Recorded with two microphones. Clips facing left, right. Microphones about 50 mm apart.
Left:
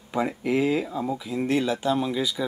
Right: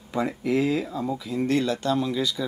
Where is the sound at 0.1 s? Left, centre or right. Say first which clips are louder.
Even; centre.